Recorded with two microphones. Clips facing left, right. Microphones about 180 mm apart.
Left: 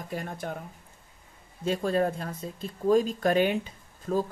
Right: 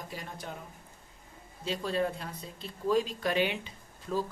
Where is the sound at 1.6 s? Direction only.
50° left (ahead or behind).